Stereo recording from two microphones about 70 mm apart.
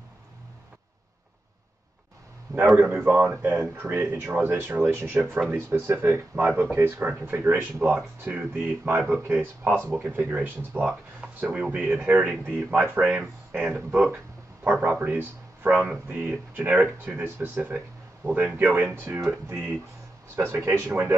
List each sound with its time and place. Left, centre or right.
2.6 s a man's voice: centre
2.9 s speech: right
15.7 s speech: centre
19.0 s speech: right
20.3 s speech: right